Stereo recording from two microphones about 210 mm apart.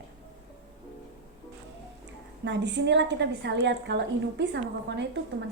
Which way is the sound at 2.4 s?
55° right (ahead or behind).